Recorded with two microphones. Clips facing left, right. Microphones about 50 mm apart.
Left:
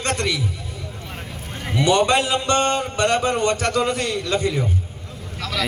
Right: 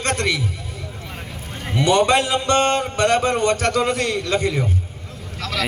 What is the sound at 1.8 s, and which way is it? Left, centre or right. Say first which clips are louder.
Speech: right 1 dB; right.